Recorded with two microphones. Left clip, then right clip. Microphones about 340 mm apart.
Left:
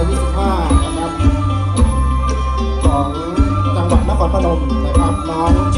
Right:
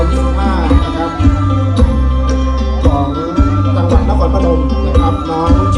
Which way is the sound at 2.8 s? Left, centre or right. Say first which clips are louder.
Right 3 dB; centre.